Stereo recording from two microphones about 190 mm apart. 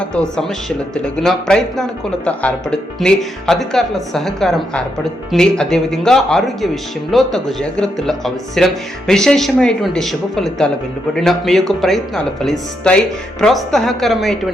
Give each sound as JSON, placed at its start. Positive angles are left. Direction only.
{"t": 0.0, "sound": "speech", "side_deg": 5}